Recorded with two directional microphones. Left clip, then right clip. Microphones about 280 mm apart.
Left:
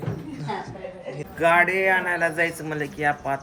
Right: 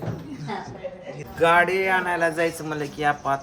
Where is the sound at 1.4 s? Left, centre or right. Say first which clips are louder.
Even; centre.